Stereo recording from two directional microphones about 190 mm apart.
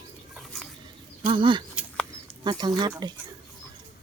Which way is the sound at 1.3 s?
25° right (ahead or behind).